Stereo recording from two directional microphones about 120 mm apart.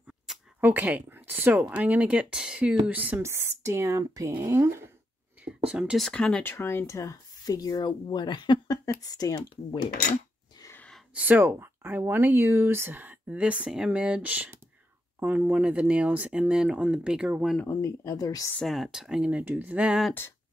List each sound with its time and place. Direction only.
0.6 s speech: 15° right (ahead or behind)
4.6 s speech: 20° right (ahead or behind)
5.4 s speech: 5° right (ahead or behind)
6.0 s speech: 5° left (ahead or behind)
6.5 s speech: 20° left (ahead or behind)
11.1 s speech: 15° right (ahead or behind)
17.6 s speech: 25° left (ahead or behind)
18.6 s speech: centre (ahead or behind)